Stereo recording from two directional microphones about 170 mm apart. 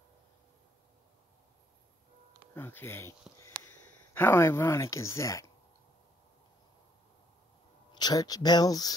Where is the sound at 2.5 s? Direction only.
15° left (ahead or behind).